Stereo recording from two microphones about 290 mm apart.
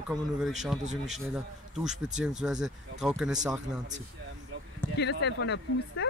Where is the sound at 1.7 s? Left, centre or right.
Centre.